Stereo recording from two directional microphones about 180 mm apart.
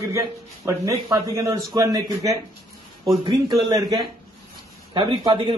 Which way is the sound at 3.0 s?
25° right (ahead or behind).